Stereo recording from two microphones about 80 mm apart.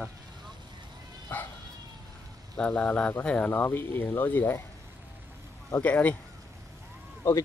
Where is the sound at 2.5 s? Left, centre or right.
Centre.